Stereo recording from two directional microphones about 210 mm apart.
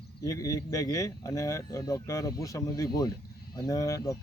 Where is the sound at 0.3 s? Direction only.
15° left (ahead or behind).